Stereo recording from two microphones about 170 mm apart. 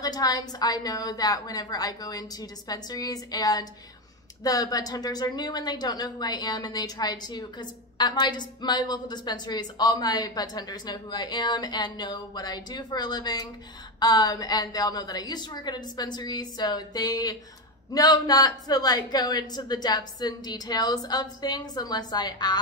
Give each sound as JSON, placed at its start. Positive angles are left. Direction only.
{"t": 0.0, "sound": "a woman's voice", "side_deg": 20}